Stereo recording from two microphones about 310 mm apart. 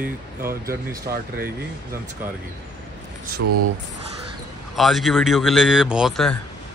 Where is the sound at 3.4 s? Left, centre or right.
Right.